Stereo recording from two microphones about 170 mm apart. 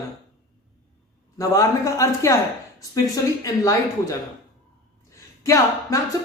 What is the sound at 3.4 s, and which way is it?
Speech, 20° left (ahead or behind).